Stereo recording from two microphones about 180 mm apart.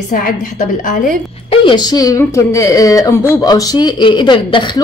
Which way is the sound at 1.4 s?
25° left (ahead or behind).